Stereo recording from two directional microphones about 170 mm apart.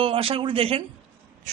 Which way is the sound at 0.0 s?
35° right (ahead or behind).